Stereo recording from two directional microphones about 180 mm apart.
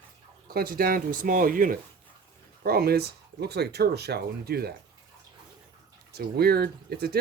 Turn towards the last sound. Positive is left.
turn(degrees=-60)  # may be behind; listen again after turning